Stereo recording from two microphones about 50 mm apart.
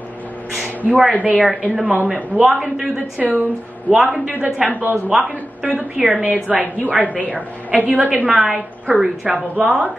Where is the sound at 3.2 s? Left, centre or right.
Right.